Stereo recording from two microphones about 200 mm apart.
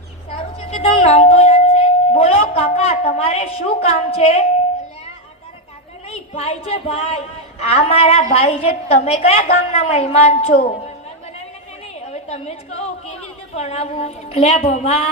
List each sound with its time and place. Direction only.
0.3 s a sound: 30° left (ahead or behind)
6.1 s a woman's voice: 30° left (ahead or behind)
11.9 s a woman's voice: 35° left (ahead or behind)